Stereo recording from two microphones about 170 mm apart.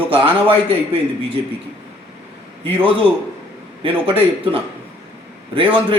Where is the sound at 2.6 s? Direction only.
30° right (ahead or behind).